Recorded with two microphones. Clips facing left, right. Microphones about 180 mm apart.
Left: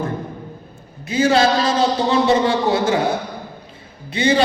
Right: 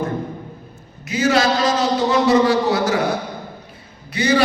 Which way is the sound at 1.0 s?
30° left (ahead or behind).